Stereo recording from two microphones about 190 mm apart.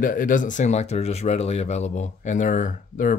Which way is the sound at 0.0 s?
45° left (ahead or behind).